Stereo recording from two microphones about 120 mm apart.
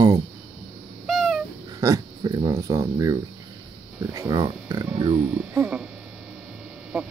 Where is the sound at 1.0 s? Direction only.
Centre (ahead or behind).